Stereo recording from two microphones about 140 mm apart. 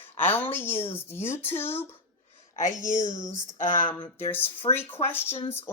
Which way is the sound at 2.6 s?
60° left (ahead or behind).